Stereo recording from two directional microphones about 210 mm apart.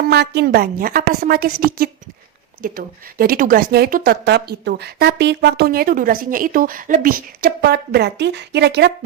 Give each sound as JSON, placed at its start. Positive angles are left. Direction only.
{"t": 0.1, "sound": "speech", "side_deg": -50}